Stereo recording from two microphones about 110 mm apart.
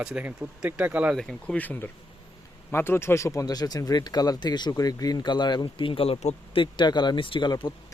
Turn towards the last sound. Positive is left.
turn(degrees=35)  # may be behind; listen again after turning